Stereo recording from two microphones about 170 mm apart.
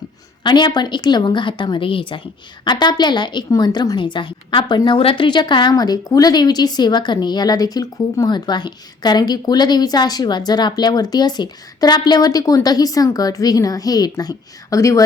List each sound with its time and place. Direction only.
0.4 s a woman's voice: 25° left (ahead or behind)